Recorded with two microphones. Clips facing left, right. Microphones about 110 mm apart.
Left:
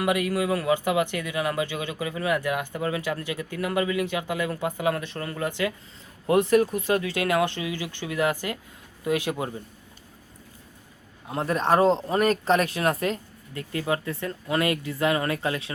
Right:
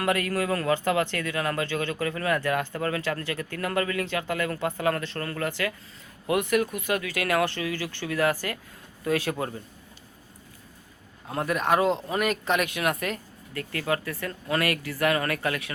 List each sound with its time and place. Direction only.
0.0 s speech: 15° left (ahead or behind)
6.2 s speech: 30° left (ahead or behind); by 9.6 s 15° left (ahead or behind)
11.3 s speech: 25° left (ahead or behind)